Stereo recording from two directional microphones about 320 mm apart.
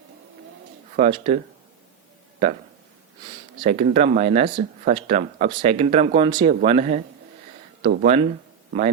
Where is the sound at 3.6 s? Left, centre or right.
Right.